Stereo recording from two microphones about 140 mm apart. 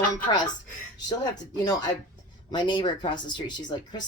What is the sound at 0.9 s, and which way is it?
Speech, 30° left (ahead or behind).